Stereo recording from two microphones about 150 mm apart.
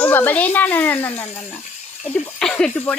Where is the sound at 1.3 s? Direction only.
50° left (ahead or behind).